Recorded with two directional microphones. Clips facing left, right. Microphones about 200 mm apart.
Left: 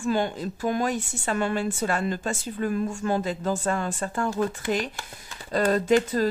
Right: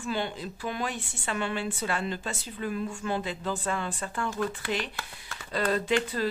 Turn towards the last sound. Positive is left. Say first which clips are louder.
# left 6 dB
turn(degrees=45)  # may be behind; listen again after turning